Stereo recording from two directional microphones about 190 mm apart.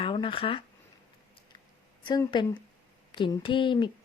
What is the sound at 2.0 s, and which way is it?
Speech, 25° left (ahead or behind).